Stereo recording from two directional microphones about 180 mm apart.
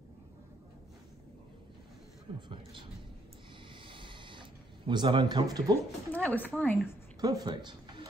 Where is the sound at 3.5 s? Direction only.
30° right (ahead or behind).